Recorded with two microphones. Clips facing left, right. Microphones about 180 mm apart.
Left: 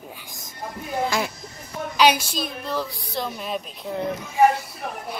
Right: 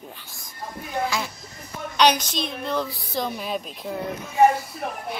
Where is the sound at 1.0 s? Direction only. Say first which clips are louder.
Left 4 dB; 55° left (ahead or behind).